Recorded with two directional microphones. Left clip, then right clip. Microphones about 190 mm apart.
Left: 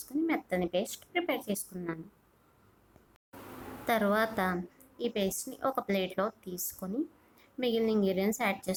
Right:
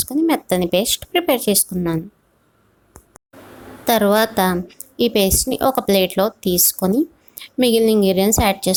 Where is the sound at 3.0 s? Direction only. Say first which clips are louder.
Right 18 dB; 35° right (ahead or behind).